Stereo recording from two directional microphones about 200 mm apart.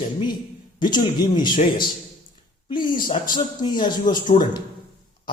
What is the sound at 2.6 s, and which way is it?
Speech, 20° left (ahead or behind).